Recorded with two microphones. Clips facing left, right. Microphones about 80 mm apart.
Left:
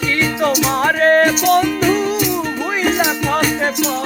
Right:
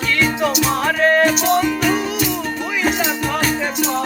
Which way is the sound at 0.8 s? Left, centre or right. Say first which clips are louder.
Left 3 dB; left.